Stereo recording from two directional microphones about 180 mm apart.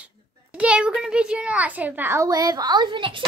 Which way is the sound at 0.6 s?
5° right (ahead or behind).